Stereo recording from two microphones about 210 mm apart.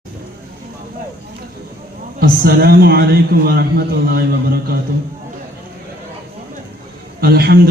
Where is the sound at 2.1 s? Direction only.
45° right (ahead or behind).